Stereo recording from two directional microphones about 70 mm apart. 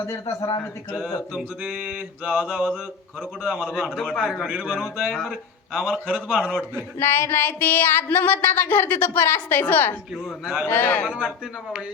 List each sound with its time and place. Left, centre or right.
1.0 s mantra: centre
3.4 s mantra: centre
3.8 s a man's voice: centre
7.0 s a sound: left
10.4 s mantra: centre
10.7 s a sound: left
11.1 s mantra: centre